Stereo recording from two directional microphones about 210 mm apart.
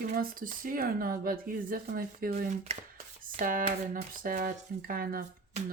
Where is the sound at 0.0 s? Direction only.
40° right (ahead or behind).